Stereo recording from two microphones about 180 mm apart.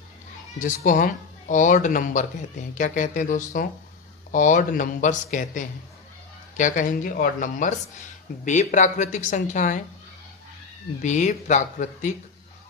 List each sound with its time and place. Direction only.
0.6 s speech: 45° left (ahead or behind)
11.0 s speech: 40° left (ahead or behind)